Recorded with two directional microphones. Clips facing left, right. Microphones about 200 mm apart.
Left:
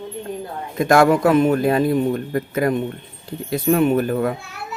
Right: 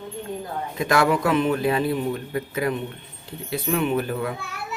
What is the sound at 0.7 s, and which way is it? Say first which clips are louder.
A man's voice: left 6 dB; 45° left (ahead or behind).